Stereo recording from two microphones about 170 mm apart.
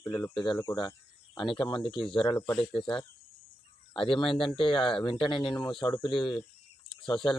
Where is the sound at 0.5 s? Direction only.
20° left (ahead or behind).